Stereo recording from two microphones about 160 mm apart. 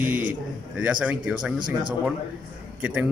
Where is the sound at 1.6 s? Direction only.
30° right (ahead or behind).